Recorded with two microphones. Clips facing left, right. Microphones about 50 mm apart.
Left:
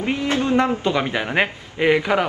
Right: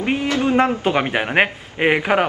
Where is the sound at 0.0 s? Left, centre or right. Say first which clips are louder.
Right 2 dB; right.